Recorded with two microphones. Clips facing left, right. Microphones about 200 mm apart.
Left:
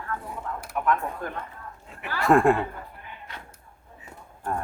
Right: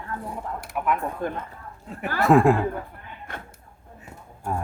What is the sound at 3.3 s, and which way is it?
Speech, 50° right (ahead or behind).